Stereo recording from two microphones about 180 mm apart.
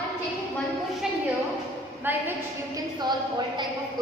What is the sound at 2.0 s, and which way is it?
Speech, 10° right (ahead or behind).